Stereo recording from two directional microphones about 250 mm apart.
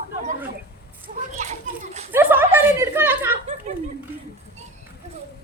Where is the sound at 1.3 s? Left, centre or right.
Right.